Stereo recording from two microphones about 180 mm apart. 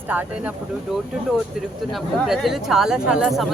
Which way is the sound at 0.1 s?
10° right (ahead or behind).